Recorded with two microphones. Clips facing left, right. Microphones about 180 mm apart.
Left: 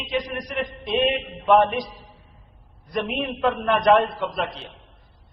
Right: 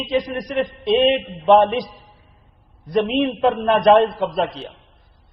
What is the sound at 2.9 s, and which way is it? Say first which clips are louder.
A man's voice: right 8 dB; 30° right (ahead or behind).